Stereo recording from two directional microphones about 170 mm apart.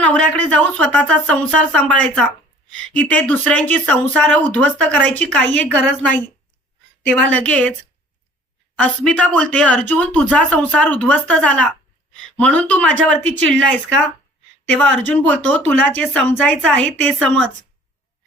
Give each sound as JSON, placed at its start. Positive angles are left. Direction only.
{"t": 0.0, "sound": "a woman's voice", "side_deg": 10}
{"t": 8.8, "sound": "a woman's voice", "side_deg": 5}
{"t": 14.7, "sound": "a woman's voice", "side_deg": 5}